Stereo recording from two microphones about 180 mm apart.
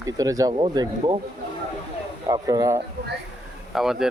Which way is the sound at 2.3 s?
20° right (ahead or behind).